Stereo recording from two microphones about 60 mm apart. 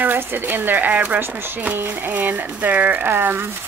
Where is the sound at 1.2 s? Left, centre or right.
Right.